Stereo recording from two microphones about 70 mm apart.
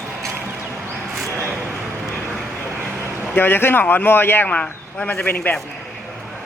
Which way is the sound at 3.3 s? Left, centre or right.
Left.